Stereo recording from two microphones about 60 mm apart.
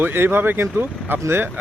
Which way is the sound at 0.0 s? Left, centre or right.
Right.